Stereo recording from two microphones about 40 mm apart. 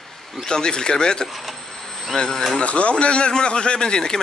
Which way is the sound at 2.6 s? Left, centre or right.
Left.